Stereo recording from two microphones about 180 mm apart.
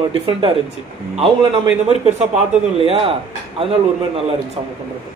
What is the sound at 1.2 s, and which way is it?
Speech, 35° right (ahead or behind).